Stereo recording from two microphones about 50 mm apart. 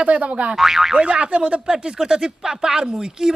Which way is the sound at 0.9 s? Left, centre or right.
Right.